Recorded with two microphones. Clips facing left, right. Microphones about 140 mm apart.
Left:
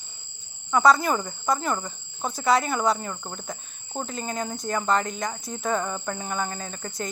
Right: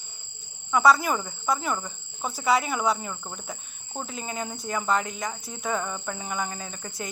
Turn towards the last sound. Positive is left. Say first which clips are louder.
# left 2 dB
turn(degrees=-10)  # may be behind; listen again after turning